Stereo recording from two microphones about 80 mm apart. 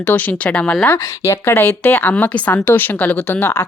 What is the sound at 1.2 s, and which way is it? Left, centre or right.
A woman's voice, left.